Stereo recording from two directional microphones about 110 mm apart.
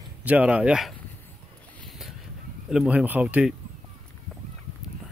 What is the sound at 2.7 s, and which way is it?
Speech, 10° right (ahead or behind).